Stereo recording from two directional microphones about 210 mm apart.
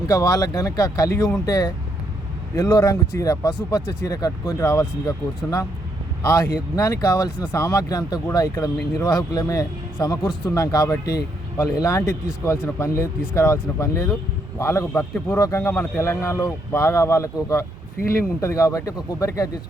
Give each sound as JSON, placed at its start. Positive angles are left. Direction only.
{"t": 0.1, "sound": "speech", "side_deg": 15}
{"t": 6.7, "sound": "speech", "side_deg": 15}